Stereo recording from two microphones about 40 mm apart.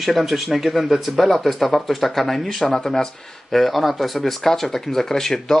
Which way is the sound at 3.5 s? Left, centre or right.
Centre.